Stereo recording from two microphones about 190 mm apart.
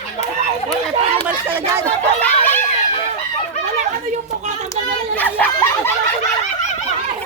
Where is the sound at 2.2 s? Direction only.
10° left (ahead or behind).